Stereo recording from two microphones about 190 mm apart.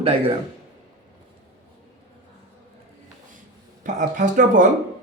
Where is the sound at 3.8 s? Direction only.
45° right (ahead or behind).